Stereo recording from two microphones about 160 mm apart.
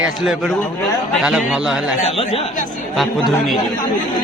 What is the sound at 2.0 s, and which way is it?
Speech, 40° left (ahead or behind).